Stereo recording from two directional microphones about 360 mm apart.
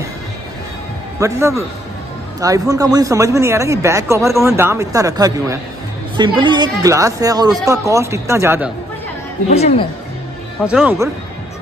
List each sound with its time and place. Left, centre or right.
1.2 s speech: centre
9.5 s speech: centre
10.6 s speech: centre